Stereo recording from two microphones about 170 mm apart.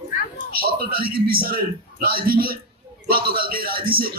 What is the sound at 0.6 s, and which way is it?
Speech, 60° right (ahead or behind).